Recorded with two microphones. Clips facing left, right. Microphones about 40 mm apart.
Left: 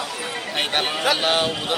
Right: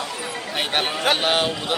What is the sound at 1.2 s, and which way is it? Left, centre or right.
Speech, centre.